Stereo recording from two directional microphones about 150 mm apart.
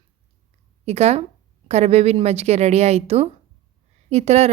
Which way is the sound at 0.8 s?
45° right (ahead or behind).